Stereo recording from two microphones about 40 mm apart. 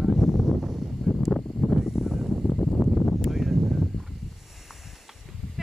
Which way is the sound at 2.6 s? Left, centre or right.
Centre.